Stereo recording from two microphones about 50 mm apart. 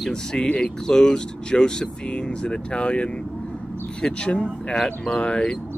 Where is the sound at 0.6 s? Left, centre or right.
Centre.